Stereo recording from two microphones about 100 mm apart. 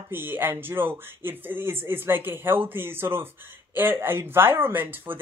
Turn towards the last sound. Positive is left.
turn(degrees=-20)  # may be behind; listen again after turning